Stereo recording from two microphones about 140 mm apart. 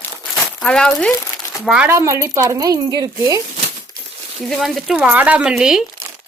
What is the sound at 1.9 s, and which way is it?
Speech, 20° right (ahead or behind).